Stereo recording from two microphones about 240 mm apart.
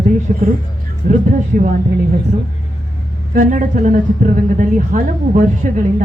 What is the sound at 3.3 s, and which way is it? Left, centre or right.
A woman's voice, right.